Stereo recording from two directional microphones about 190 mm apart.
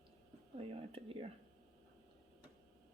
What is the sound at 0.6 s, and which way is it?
Speech, 30° right (ahead or behind).